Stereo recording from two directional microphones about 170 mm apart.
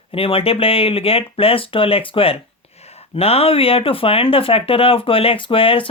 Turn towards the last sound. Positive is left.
turn(degrees=30)  # may be behind; listen again after turning